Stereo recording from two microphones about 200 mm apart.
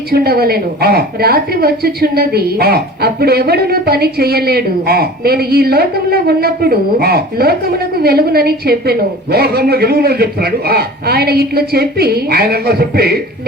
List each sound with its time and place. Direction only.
0.1 s a woman's voice: 50° right (ahead or behind)